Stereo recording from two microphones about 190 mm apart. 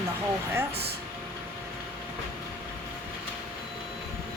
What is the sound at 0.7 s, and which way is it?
Speech, 60° right (ahead or behind).